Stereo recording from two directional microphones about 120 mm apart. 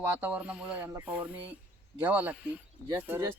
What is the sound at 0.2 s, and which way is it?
Speech, 10° right (ahead or behind).